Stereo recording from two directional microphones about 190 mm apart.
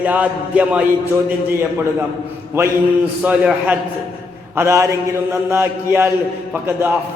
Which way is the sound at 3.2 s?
10° right (ahead or behind).